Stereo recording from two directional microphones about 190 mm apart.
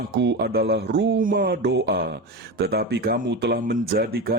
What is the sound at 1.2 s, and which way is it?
Speech, 50° right (ahead or behind).